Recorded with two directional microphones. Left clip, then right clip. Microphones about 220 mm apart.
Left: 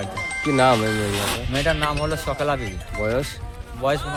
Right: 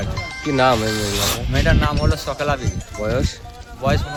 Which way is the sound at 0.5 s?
Centre (ahead or behind).